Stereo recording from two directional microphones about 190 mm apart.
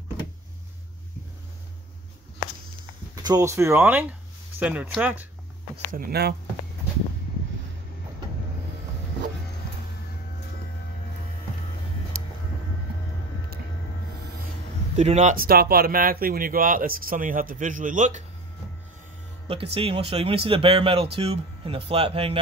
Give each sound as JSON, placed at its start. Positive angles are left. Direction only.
{"t": 3.2, "sound": "speech", "side_deg": -20}
{"t": 5.9, "sound": "speech", "side_deg": -50}
{"t": 15.0, "sound": "speech", "side_deg": -35}
{"t": 19.4, "sound": "speech", "side_deg": -30}